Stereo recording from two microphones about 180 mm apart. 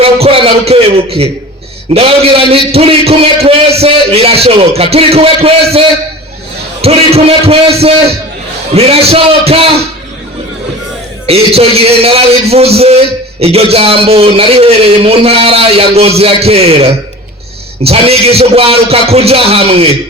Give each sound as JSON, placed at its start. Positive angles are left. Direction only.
{"t": 0.0, "sound": "a man's voice", "side_deg": -30}
{"t": 6.8, "sound": "a man's voice", "side_deg": -35}
{"t": 11.3, "sound": "a man's voice", "side_deg": -35}